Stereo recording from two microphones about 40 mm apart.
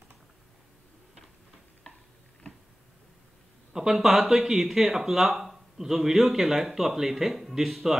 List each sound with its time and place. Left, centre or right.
1.8 s stir: left
3.7 s speech: centre